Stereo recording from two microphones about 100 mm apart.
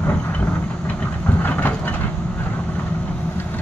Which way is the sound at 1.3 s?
20° left (ahead or behind).